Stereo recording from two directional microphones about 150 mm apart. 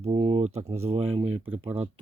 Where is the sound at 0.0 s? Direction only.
40° right (ahead or behind).